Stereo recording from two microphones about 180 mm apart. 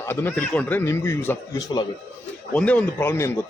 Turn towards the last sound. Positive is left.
turn(degrees=15)  # may be behind; listen again after turning